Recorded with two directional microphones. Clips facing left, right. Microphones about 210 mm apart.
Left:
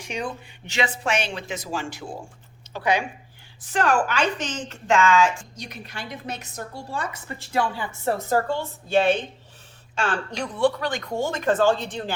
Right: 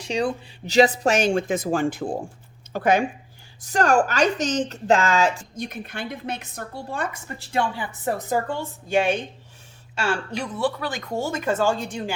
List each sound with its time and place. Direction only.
0.0 s a woman's voice: 35° right (ahead or behind)
5.5 s a woman's voice: 50° right (ahead or behind)
7.3 s a woman's voice: 30° right (ahead or behind)
7.8 s speech: 15° right (ahead or behind)